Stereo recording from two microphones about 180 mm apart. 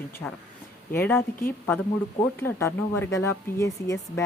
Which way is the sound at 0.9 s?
10° left (ahead or behind).